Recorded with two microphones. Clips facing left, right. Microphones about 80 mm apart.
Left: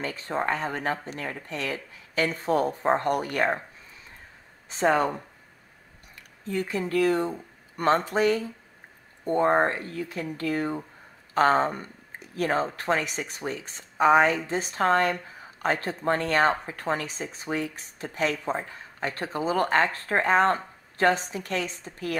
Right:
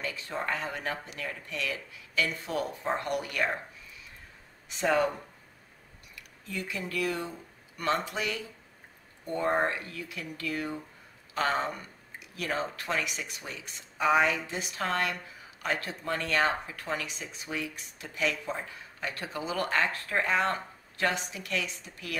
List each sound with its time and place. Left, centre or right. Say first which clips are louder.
0.0 s a woman's voice: left 6 dB; left
6.1 s a woman's voice: left 8 dB; left